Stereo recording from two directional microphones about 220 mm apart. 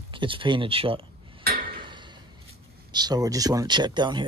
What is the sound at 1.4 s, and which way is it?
Tick-tock, 45° right (ahead or behind).